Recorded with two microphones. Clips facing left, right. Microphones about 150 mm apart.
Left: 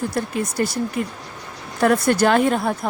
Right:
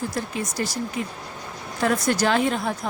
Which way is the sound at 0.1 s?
60° left (ahead or behind).